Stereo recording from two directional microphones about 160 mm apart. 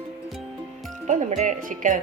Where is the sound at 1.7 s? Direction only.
55° right (ahead or behind).